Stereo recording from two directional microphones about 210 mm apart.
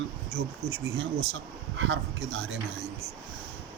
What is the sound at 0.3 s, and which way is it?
Speech, 50° right (ahead or behind).